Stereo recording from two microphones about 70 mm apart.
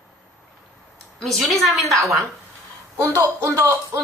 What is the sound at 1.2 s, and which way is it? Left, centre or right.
Speech, centre.